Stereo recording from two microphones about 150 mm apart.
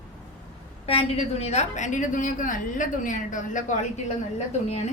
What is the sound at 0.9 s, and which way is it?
A woman's voice, 45° left (ahead or behind).